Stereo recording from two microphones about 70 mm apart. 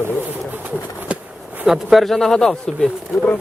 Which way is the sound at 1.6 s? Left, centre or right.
Centre.